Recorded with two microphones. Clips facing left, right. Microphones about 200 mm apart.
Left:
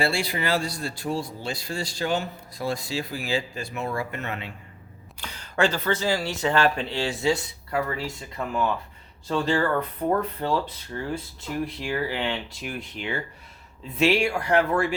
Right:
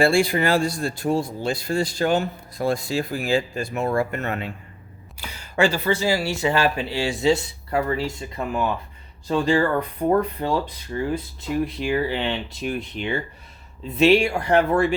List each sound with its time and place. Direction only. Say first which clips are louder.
0.0 s a man's voice: right 7 dB; 50° right (ahead or behind)
5.2 s speech: right 3 dB; 10° right (ahead or behind); by 14.9 s 25° right (ahead or behind)